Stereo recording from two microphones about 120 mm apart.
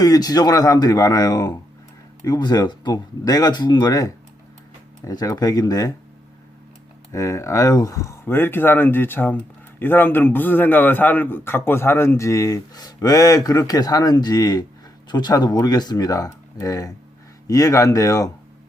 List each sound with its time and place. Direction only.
0.0 s speech: 30° left (ahead or behind)
7.1 s speech: 25° left (ahead or behind)